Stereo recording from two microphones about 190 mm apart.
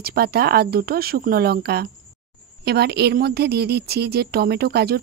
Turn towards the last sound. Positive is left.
turn(degrees=-55)  # may be behind; listen again after turning